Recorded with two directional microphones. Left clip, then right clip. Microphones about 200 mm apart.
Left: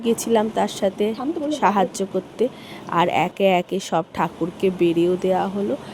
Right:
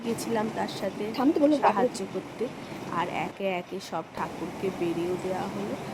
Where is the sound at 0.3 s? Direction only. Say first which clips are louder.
Left 9 dB; 35° left (ahead or behind).